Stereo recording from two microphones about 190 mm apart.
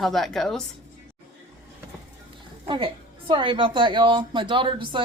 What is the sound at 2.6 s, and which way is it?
A woman's voice, 25° right (ahead or behind).